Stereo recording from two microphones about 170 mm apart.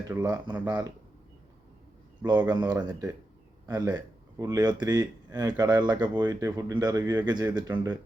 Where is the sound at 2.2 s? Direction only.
25° right (ahead or behind).